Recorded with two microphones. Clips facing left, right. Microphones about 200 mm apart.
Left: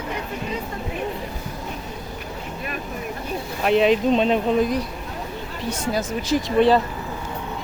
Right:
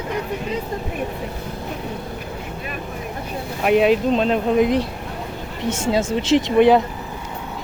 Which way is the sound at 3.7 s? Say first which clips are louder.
Right 1 dB; 10° right (ahead or behind).